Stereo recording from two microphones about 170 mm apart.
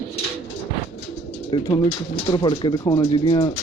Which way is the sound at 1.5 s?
25° left (ahead or behind).